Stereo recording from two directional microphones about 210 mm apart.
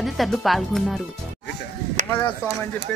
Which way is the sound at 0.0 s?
Centre (ahead or behind).